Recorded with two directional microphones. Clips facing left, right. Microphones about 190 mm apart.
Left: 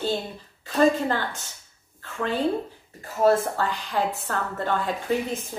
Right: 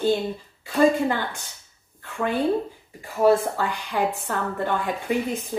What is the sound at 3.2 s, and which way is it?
A woman's voice, 15° right (ahead or behind).